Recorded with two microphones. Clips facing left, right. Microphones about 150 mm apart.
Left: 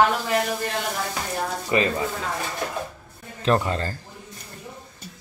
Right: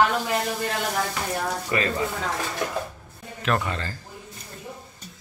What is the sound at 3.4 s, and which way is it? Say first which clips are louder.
Speech: left 4 dB; 30° left (ahead or behind).